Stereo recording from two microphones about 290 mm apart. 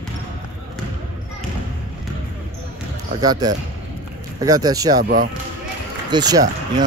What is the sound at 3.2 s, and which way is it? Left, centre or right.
Speech, centre.